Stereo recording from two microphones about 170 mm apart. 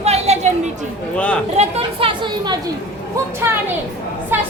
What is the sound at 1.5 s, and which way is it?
Speech, 35° right (ahead or behind).